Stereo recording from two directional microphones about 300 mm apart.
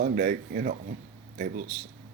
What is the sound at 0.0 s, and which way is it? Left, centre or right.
Speech, right.